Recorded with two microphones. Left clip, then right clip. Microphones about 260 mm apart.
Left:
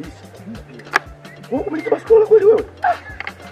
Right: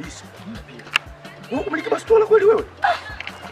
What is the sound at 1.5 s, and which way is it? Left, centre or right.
Speech, centre.